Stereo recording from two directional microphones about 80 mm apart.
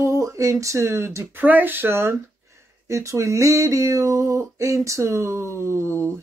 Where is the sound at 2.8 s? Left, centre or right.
Right.